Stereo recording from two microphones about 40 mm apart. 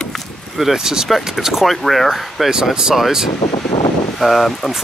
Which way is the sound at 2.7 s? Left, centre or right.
Centre.